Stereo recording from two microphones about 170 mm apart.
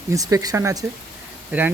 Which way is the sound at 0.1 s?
20° right (ahead or behind).